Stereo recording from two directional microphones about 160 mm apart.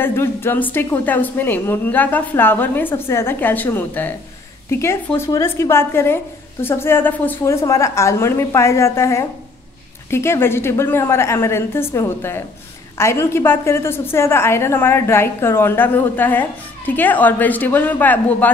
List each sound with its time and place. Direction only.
0.0 s a woman's voice: 15° left (ahead or behind)